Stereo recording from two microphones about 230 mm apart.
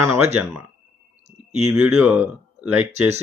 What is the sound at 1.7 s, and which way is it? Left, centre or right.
Speech, centre.